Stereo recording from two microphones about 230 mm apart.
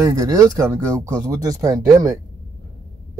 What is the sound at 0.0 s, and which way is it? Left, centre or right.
Speech, centre.